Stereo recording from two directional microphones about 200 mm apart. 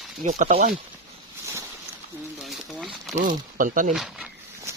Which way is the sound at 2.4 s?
Centre (ahead or behind).